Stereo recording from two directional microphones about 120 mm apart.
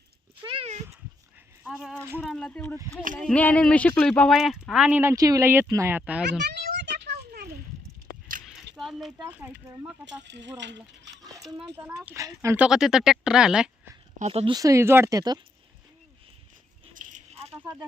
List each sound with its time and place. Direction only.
0.4 s a sound: 45° right (ahead or behind)
2.2 s speech: 5° left (ahead or behind); by 5.1 s 15° right (ahead or behind)
5.1 s speech: 30° right (ahead or behind)
6.0 s speech: 10° right (ahead or behind)
8.4 s a sound: 5° right (ahead or behind)
9.3 s speech: 10° right (ahead or behind)
11.4 s speech: 5° right (ahead or behind)
12.1 s speech: 25° right (ahead or behind)
12.5 s speech: 5° right (ahead or behind)
14.2 s speech: 60° right (ahead or behind)
14.5 s speech: 25° right (ahead or behind)
16.9 s a sound: 90° right; by 17.6 s 60° right (ahead or behind)